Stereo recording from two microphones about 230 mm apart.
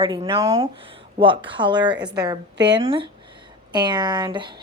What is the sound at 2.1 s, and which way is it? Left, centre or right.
A woman's voice, centre.